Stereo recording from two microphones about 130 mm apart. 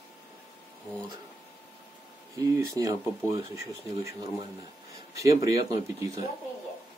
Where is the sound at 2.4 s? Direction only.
25° right (ahead or behind).